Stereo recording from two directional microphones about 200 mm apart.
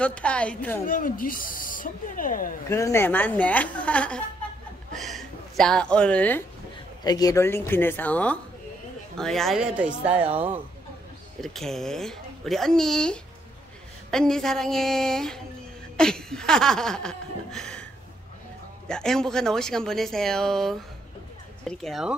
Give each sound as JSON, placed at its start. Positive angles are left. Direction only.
{"t": 0.0, "sound": "speech", "side_deg": 5}
{"t": 0.8, "sound": "speech", "side_deg": 45}
{"t": 2.7, "sound": "a woman's voice", "side_deg": 15}
{"t": 4.9, "sound": "a sound", "side_deg": 0}
{"t": 7.1, "sound": "a woman's voice", "side_deg": 20}
{"t": 11.4, "sound": "speech", "side_deg": 0}
{"t": 16.0, "sound": "chuckle", "side_deg": 5}
{"t": 18.9, "sound": "speech", "side_deg": 5}